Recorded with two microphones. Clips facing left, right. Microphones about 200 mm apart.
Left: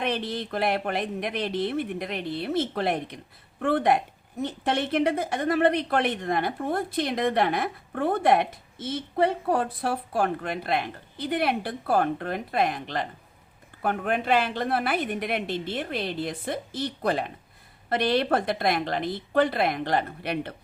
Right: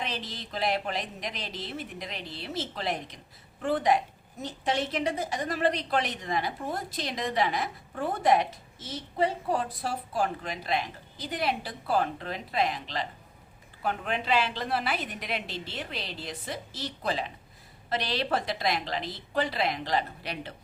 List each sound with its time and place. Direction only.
0.0 s a woman's voice: 60° left (ahead or behind)